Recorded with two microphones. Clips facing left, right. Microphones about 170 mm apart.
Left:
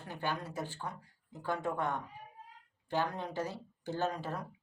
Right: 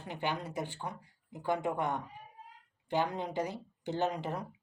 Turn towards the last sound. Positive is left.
turn(degrees=-20)  # may be behind; listen again after turning